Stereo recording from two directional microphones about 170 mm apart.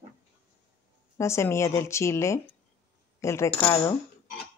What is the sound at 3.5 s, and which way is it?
Speech, 35° left (ahead or behind).